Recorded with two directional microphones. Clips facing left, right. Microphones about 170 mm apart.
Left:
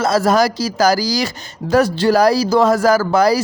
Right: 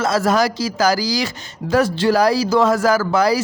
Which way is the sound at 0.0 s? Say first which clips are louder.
Left 3 dB; 35° left (ahead or behind).